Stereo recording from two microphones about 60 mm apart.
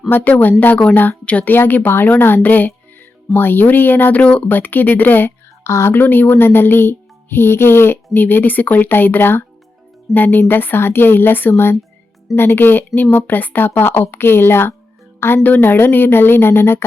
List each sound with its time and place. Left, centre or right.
0.1 s speech: left
1.5 s speech: left
5.6 s a woman's voice: left
5.9 s speech: left